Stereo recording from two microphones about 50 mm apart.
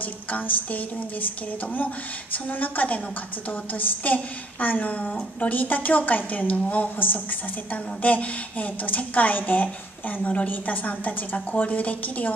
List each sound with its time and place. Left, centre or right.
0.0 s a woman's voice: left